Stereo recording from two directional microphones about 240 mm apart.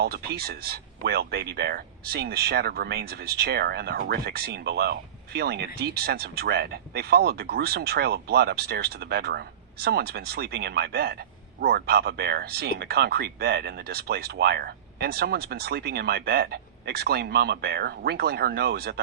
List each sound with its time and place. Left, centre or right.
0.0 s speech: right